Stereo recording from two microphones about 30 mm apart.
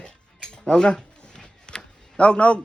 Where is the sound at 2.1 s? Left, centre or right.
Left.